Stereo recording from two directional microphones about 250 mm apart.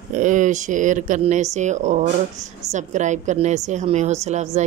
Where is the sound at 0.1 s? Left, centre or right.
Right.